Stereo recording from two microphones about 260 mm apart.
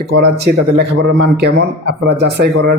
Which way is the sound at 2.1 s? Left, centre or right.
Right.